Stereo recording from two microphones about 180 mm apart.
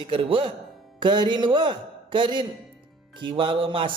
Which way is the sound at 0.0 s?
30° right (ahead or behind).